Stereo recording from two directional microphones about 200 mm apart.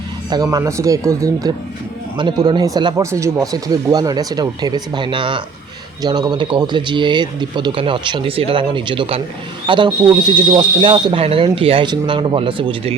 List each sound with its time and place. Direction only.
0.3 s speech: 20° right (ahead or behind)